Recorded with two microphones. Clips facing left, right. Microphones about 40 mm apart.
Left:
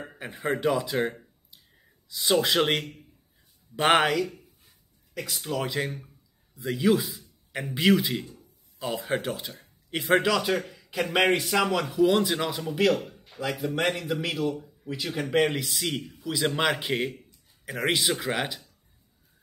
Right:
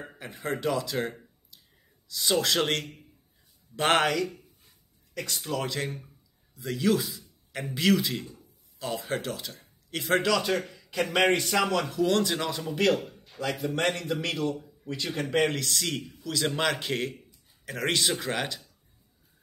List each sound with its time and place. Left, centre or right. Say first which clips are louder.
0.1 s a man's voice: left 4 dB; centre
7.1 s a sound: left 1 dB; centre
7.7 s a man's voice: left 2 dB; centre